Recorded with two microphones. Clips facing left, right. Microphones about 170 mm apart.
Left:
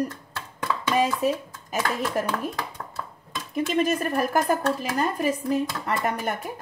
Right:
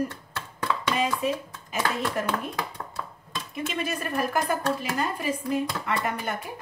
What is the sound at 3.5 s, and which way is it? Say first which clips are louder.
Speech: left 8 dB; 40° left (ahead or behind).